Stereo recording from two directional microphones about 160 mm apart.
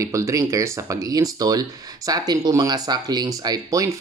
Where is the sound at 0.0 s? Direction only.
20° right (ahead or behind).